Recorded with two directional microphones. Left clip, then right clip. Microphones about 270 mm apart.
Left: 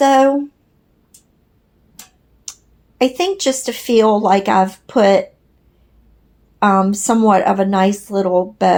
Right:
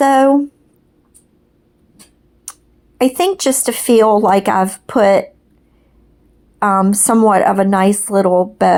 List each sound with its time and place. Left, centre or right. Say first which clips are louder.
0.0 s speech: right 1 dB; right
2.5 s a sound: left 2 dB; right
3.0 s speech: right 2 dB; right
6.6 s speech: even; right